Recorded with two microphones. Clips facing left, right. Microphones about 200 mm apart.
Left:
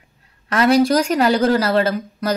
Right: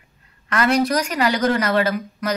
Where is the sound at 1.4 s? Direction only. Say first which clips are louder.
Left 3 dB; 30° left (ahead or behind).